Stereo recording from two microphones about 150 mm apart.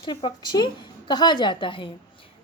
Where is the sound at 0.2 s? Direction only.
30° left (ahead or behind).